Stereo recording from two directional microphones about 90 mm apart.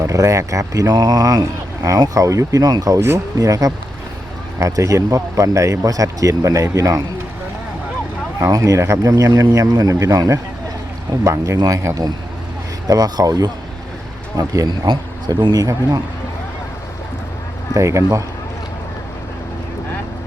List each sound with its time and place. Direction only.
0.0 s speech: 35° right (ahead or behind)
3.0 s speech: 35° right (ahead or behind)
8.4 s speech: 40° right (ahead or behind)
14.7 s speech: 60° right (ahead or behind)
17.7 s speech: 35° right (ahead or behind)